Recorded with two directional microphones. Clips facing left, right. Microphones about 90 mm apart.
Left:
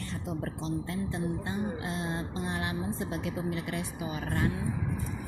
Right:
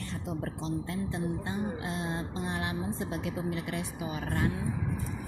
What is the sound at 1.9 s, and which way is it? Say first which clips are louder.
Speech: even; 20° right (ahead or behind).